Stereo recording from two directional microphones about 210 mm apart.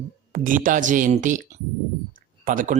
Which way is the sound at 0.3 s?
40° right (ahead or behind).